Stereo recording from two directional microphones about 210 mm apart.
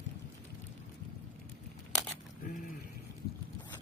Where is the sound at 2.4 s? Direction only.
40° left (ahead or behind).